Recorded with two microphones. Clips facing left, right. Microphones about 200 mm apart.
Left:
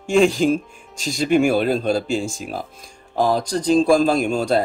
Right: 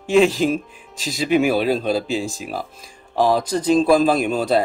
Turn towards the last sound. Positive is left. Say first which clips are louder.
# even
turn(degrees=0)  # may be behind; listen again after turning